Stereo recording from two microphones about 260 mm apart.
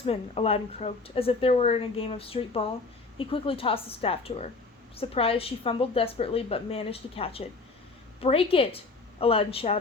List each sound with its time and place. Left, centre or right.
0.0 s speech: left